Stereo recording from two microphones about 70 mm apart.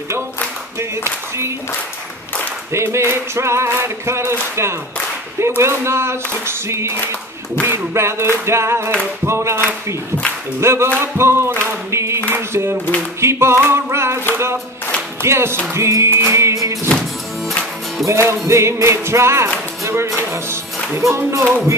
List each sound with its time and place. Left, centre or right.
0.7 s clapping: right
2.7 s a sound: right
18.0 s music: centre
18.5 s a sound: right
19.8 s music: right
20.2 s speech: right